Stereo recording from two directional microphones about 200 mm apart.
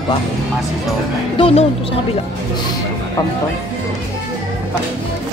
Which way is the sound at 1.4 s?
30° left (ahead or behind).